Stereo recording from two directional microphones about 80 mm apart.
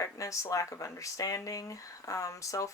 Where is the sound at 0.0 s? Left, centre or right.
Left.